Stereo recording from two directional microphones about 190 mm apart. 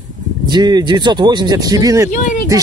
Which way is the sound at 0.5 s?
20° right (ahead or behind).